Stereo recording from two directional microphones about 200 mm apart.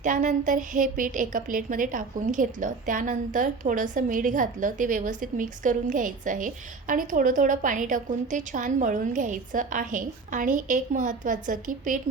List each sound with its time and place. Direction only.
0.0 s a woman's voice: 40° right (ahead or behind)